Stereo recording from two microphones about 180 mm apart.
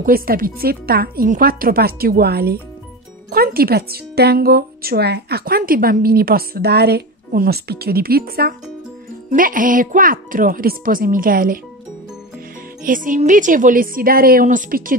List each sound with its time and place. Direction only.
0.0 s speech: 55° right (ahead or behind)
12.8 s speech: 50° right (ahead or behind)